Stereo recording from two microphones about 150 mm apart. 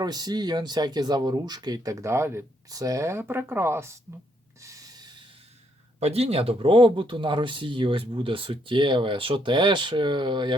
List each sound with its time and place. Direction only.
0.0 s speech: 25° right (ahead or behind)
4.6 s snort: 25° right (ahead or behind)
6.0 s speech: 45° right (ahead or behind)